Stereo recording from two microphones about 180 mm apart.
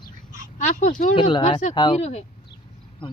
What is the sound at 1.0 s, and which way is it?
Speech, 30° left (ahead or behind).